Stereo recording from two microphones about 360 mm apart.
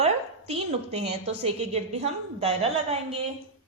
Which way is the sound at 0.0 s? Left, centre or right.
Centre.